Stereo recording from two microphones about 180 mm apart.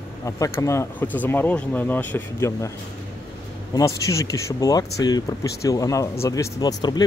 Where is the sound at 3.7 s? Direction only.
20° left (ahead or behind).